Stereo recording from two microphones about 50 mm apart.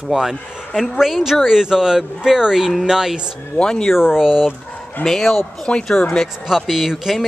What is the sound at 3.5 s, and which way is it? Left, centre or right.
Speech, centre.